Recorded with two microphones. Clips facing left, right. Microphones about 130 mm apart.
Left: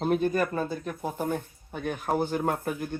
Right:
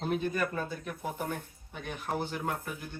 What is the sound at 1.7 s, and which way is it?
Speech, 45° left (ahead or behind).